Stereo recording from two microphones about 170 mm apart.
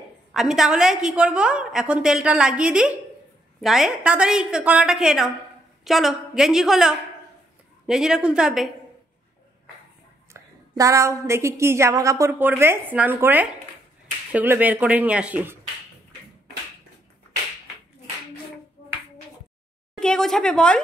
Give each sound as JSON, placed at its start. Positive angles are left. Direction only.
{"t": 0.3, "sound": "a woman's voice", "side_deg": 0}
{"t": 10.8, "sound": "a woman's voice", "side_deg": -20}
{"t": 20.0, "sound": "a woman's voice", "side_deg": 5}